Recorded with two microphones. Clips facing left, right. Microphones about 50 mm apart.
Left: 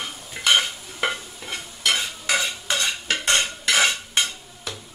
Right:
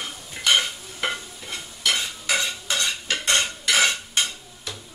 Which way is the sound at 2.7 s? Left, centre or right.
Left.